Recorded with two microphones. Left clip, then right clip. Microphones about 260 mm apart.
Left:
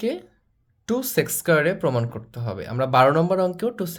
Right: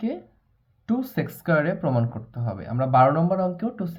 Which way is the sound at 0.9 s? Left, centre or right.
Left.